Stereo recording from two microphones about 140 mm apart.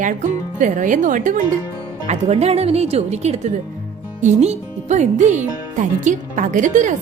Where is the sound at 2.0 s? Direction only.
50° right (ahead or behind).